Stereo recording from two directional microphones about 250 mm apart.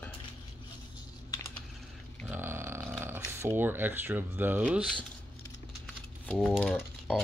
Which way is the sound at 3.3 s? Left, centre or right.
Centre.